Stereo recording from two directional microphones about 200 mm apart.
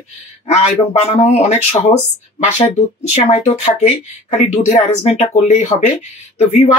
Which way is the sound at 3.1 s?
35° left (ahead or behind).